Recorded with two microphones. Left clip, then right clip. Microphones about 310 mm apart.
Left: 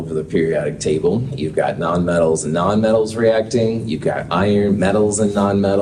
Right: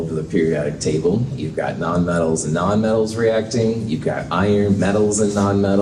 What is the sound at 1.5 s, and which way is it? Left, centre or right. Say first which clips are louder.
Speech: left 3 dB; left.